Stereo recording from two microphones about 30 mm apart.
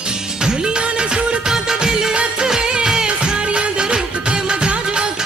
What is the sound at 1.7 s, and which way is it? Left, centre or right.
Music of bollywood, right.